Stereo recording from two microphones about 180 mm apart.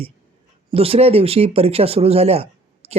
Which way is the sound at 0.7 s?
35° right (ahead or behind).